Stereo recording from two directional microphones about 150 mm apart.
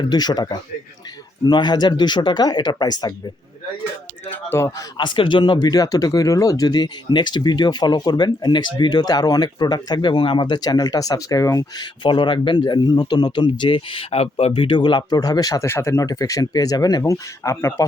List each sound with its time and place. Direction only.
0.0 s speech: 30° left (ahead or behind)
4.3 s speech: 15° left (ahead or behind)
4.9 s speech: 30° left (ahead or behind)